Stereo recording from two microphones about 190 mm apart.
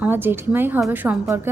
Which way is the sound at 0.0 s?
10° right (ahead or behind).